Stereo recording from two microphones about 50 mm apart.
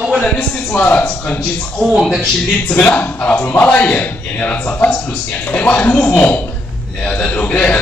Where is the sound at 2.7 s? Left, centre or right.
Left.